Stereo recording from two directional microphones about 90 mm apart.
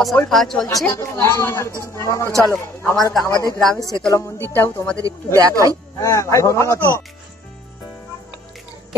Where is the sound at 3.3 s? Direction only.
40° right (ahead or behind).